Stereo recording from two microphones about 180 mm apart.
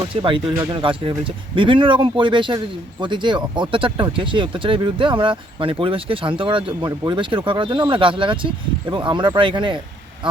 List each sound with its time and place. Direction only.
0.2 s speech: 30° right (ahead or behind)